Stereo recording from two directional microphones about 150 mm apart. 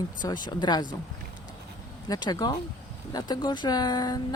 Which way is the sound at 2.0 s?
25° left (ahead or behind).